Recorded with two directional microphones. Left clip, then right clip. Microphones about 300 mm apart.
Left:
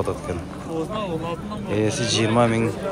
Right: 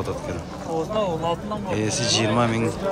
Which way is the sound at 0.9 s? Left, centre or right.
Right.